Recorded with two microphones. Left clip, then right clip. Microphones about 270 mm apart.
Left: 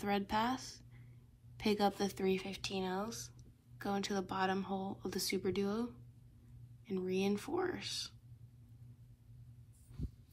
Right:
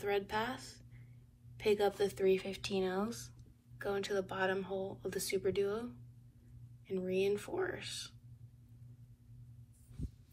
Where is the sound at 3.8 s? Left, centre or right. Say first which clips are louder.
Right 2 dB; left.